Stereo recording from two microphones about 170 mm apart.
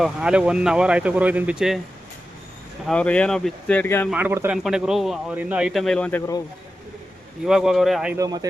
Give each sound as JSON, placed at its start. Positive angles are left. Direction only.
{"t": 0.0, "sound": "speech", "side_deg": -5}
{"t": 2.8, "sound": "speech", "side_deg": 5}
{"t": 4.1, "sound": "a man's voice", "side_deg": -10}
{"t": 7.4, "sound": "speech", "side_deg": 0}
{"t": 8.1, "sound": "speech", "side_deg": -20}